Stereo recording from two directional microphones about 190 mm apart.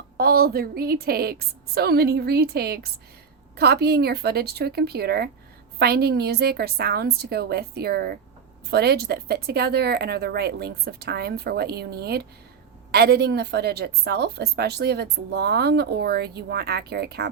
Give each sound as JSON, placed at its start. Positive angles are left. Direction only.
{"t": 0.2, "sound": "a woman's voice", "side_deg": -55}